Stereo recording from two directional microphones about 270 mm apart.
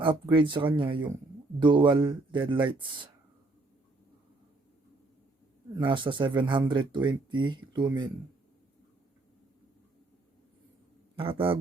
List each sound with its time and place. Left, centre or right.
0.0 s speech: centre
5.7 s speech: centre
11.2 s a man's voice: centre